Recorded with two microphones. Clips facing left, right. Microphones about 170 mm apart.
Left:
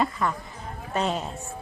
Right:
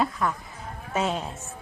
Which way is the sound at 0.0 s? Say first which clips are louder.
Even; centre (ahead or behind).